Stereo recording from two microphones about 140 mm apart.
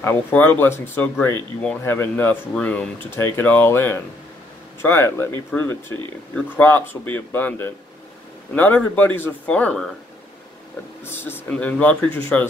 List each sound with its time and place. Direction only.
0.0 s speech: 15° left (ahead or behind)
11.1 s speech: 15° left (ahead or behind)